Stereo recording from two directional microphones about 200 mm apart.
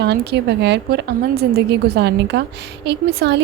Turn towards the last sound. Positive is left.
turn(degrees=-55)  # may be behind; listen again after turning